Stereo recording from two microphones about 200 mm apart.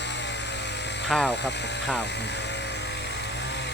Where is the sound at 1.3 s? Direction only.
60° left (ahead or behind).